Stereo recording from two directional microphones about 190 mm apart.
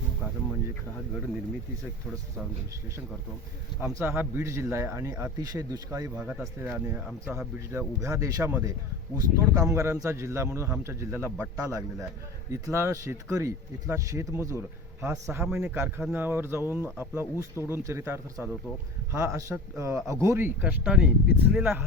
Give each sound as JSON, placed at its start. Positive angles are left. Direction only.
{"t": 3.8, "sound": "speech", "side_deg": -10}
{"t": 6.1, "sound": "speech", "side_deg": -5}